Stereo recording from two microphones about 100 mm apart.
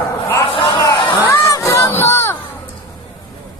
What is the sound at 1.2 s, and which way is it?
Crowd, 20° left (ahead or behind).